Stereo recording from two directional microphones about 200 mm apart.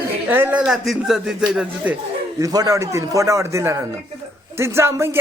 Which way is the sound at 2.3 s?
15° right (ahead or behind).